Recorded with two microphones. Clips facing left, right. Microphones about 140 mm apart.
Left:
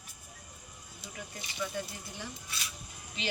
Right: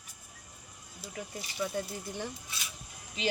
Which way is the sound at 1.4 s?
40° right (ahead or behind).